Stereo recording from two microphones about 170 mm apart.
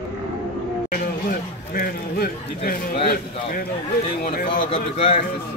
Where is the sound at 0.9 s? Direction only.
60° left (ahead or behind).